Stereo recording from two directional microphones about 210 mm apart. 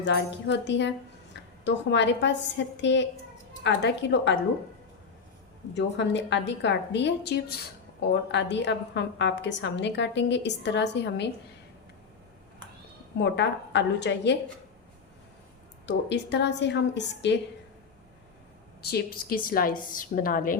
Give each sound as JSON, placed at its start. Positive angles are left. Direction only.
{"t": 0.0, "sound": "a woman's voice", "side_deg": 55}
{"t": 5.7, "sound": "a woman's voice", "side_deg": 60}
{"t": 13.1, "sound": "a woman's voice", "side_deg": 55}
{"t": 15.9, "sound": "a woman's voice", "side_deg": 55}
{"t": 18.8, "sound": "a woman's voice", "side_deg": 50}